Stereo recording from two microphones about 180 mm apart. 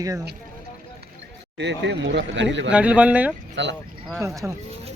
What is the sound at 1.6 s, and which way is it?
Speech, 75° right (ahead or behind).